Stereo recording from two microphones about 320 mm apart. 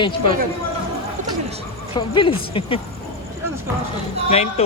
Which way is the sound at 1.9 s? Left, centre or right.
Centre.